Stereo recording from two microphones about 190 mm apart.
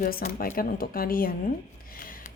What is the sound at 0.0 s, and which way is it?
A woman's voice, 50° left (ahead or behind).